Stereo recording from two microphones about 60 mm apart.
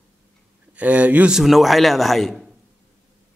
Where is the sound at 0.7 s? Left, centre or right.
Right.